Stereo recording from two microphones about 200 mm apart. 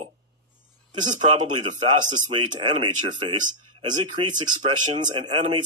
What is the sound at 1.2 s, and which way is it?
Speech, 25° right (ahead or behind).